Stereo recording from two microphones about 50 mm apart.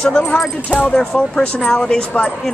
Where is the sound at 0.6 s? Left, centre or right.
Left.